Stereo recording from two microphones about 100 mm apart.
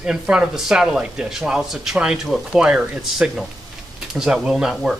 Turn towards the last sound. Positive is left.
turn(degrees=-5)  # may be behind; listen again after turning